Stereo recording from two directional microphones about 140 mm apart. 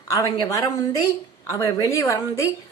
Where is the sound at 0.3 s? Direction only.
25° left (ahead or behind).